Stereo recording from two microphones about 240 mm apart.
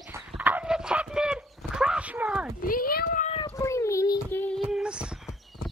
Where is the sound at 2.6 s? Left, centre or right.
Left.